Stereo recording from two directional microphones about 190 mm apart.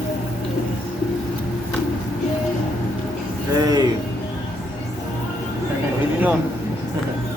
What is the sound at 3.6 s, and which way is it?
Music, 20° right (ahead or behind).